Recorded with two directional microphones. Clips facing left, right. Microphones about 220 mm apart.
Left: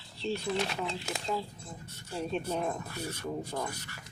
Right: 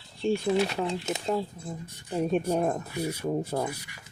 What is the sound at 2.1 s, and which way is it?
Speech, 50° right (ahead or behind).